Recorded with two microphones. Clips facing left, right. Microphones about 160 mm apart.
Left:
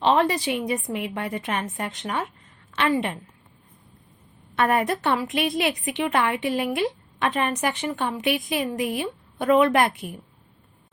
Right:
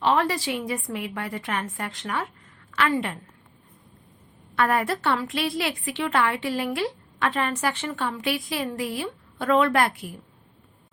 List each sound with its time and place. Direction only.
0.0 s a woman's voice: 20° left (ahead or behind)
4.5 s a woman's voice: 20° left (ahead or behind)